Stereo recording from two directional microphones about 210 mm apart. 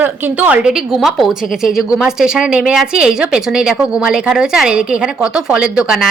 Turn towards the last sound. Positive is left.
turn(degrees=0)  # may be behind; listen again after turning